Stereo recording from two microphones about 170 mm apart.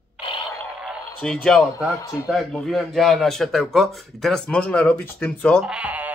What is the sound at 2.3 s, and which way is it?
A man's voice, centre (ahead or behind).